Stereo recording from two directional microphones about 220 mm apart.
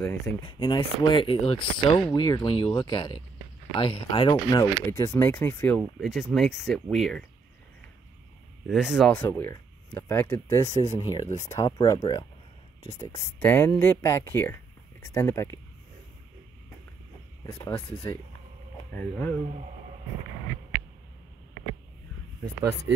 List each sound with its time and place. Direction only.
0.0 s speech: 10° left (ahead or behind)
0.4 s speech: 20° left (ahead or behind); by 7.2 s centre (ahead or behind)
8.6 s speech: centre (ahead or behind)
17.4 s speech: 15° left (ahead or behind)